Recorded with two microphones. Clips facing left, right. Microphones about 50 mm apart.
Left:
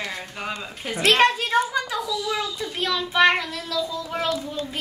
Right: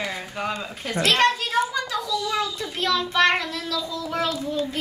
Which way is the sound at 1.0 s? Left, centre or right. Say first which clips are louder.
Left 2 dB; centre.